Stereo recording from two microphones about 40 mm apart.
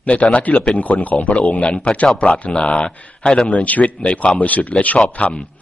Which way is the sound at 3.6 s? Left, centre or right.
Left.